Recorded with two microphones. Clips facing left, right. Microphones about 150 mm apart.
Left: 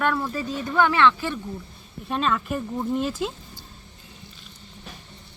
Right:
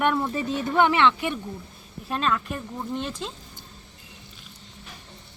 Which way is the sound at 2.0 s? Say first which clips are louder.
Left 2 dB; centre (ahead or behind).